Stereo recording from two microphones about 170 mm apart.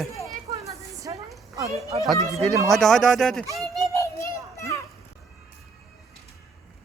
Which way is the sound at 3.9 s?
15° left (ahead or behind).